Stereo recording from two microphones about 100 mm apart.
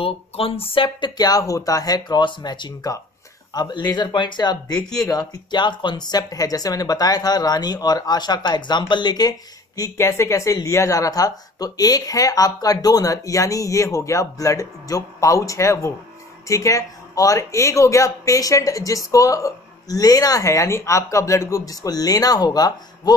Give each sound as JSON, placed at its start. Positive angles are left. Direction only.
{"t": 0.0, "sound": "speech", "side_deg": 70}
{"t": 1.1, "sound": "speech", "side_deg": 40}
{"t": 9.8, "sound": "speech", "side_deg": 30}